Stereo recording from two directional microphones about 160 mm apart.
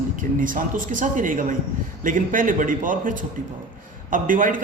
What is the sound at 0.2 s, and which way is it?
A man's voice, 55° right (ahead or behind).